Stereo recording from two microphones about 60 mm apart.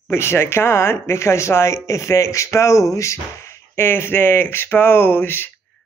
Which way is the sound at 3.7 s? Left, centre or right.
Left.